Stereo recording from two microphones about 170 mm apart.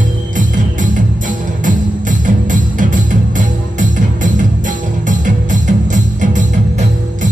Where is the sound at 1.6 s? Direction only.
50° right (ahead or behind).